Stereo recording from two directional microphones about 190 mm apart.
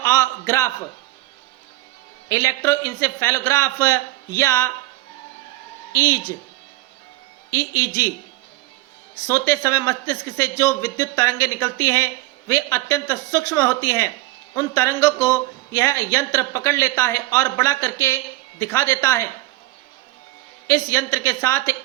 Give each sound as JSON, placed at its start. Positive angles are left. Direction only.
{"t": 0.0, "sound": "a man's voice", "side_deg": 15}
{"t": 2.3, "sound": "speech", "side_deg": 15}
{"t": 5.9, "sound": "speech", "side_deg": 15}
{"t": 7.5, "sound": "speech", "side_deg": 15}
{"t": 9.2, "sound": "speech", "side_deg": 15}
{"t": 20.7, "sound": "speech", "side_deg": 15}